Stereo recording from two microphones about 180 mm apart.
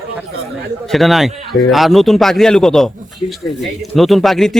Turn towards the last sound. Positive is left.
turn(degrees=0)  # may be behind; listen again after turning